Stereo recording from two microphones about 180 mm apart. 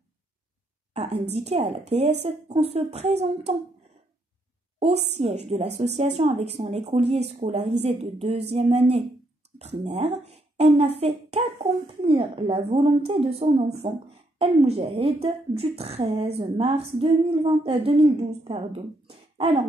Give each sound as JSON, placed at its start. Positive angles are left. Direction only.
{"t": 0.9, "sound": "speech", "side_deg": -35}
{"t": 4.8, "sound": "speech", "side_deg": -35}